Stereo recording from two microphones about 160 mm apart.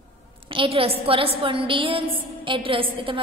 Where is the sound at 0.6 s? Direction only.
35° right (ahead or behind).